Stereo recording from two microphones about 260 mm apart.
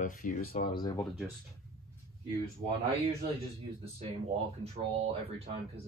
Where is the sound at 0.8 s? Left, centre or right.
Centre.